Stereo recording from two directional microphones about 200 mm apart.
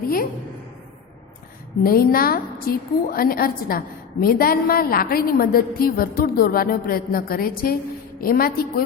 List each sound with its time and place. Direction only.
1.8 s a woman's voice: 45° left (ahead or behind)